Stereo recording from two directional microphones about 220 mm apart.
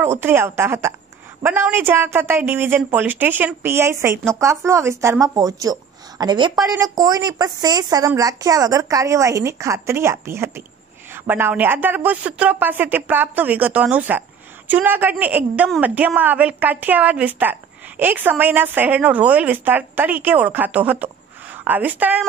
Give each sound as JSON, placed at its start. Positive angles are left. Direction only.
{"t": 0.0, "sound": "speech", "side_deg": -10}